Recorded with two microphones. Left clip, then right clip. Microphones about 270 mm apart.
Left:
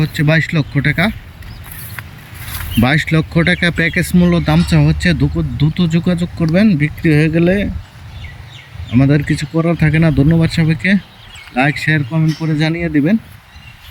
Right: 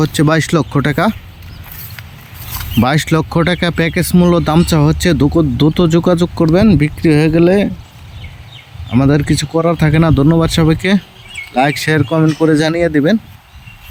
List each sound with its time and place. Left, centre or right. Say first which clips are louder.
0.0 s speech: right 2 dB; centre
2.8 s speech: right 1 dB; centre
5.2 s speech: right 8 dB; right
5.7 s speech: right 6 dB; centre
8.9 s speech: right 2 dB; centre
12.1 s speech: right 9 dB; right
12.5 s speech: right 5 dB; centre